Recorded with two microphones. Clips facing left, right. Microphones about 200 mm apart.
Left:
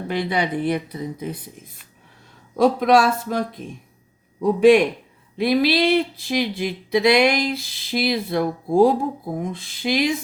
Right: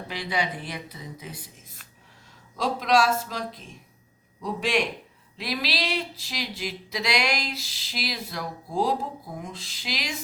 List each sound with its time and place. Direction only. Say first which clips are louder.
0.1 s speech: left 7 dB; 55° left (ahead or behind)
2.6 s a man's voice: left 7 dB; 55° left (ahead or behind)